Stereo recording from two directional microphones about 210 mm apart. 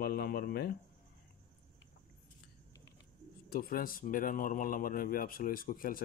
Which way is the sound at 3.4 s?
45° left (ahead or behind).